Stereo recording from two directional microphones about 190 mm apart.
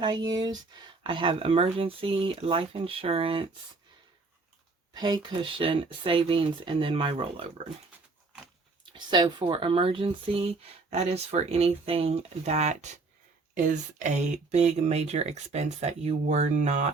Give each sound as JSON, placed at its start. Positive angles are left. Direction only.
{"t": 0.0, "sound": "speech", "side_deg": -20}
{"t": 4.9, "sound": "speech", "side_deg": -25}
{"t": 8.9, "sound": "speech", "side_deg": -20}